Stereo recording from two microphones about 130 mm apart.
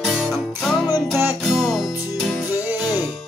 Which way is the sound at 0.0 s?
Centre (ahead or behind).